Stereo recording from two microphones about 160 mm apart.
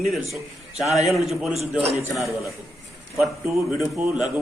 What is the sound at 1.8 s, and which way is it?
Speech, 40° right (ahead or behind).